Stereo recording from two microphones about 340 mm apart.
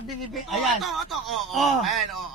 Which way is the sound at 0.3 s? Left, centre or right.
Centre.